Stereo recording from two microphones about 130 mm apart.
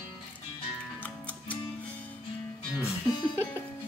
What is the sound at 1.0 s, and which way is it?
Music, 10° left (ahead or behind).